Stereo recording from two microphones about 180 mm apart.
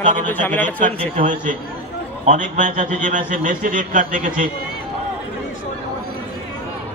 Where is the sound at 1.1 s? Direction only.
45° right (ahead or behind).